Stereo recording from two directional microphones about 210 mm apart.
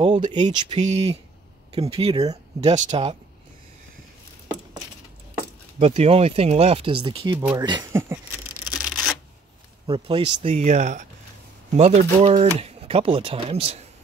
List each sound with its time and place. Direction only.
0.0 s speech: 25° right (ahead or behind)
2.7 s speech: 30° right (ahead or behind)
5.8 s speech: 30° right (ahead or behind)
7.3 s speech: 10° right (ahead or behind)
7.6 s speech: 20° right (ahead or behind)
8.7 s a sound: centre (ahead or behind)
9.8 s speech: 25° right (ahead or behind)